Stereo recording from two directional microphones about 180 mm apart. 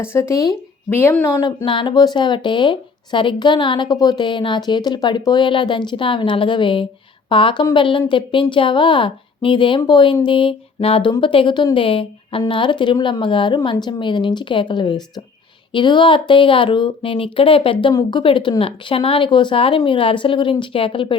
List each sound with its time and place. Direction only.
0.0 s speech: 15° left (ahead or behind)